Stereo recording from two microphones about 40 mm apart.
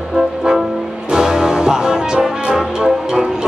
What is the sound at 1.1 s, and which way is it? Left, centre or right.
Brass instrument, centre.